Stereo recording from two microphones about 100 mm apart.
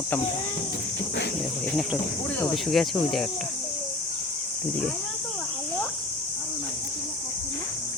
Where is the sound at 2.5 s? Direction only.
Centre (ahead or behind).